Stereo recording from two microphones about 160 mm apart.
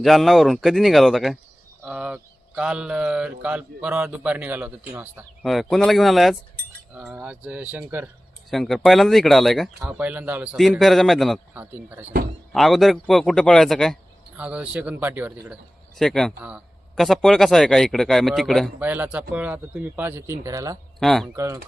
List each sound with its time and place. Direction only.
0.0 s speech: centre (ahead or behind)
5.4 s speech: centre (ahead or behind)
8.4 s speech: centre (ahead or behind)
11.5 s speech: 10° right (ahead or behind)
12.5 s speech: centre (ahead or behind)
14.3 s speech: 10° right (ahead or behind)
16.0 s speech: 5° left (ahead or behind)
16.4 s speech: 10° right (ahead or behind)
16.9 s speech: centre (ahead or behind)
18.8 s speech: 10° right (ahead or behind)
21.0 s speech: centre (ahead or behind)
21.3 s speech: 20° right (ahead or behind)